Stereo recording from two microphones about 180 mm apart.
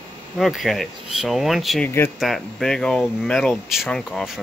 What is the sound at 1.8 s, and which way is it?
Speech, 15° left (ahead or behind).